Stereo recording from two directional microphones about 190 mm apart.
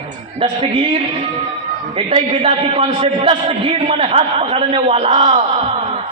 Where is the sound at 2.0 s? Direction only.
35° right (ahead or behind).